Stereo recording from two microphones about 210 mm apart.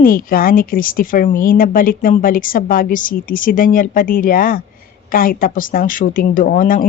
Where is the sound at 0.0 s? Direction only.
40° left (ahead or behind).